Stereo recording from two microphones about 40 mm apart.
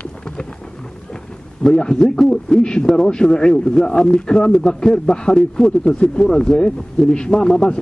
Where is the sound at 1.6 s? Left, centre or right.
Left.